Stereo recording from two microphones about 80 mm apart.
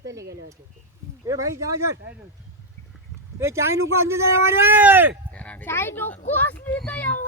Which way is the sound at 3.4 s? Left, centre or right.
Right.